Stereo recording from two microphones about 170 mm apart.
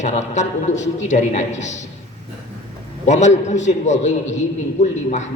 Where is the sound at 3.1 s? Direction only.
45° left (ahead or behind).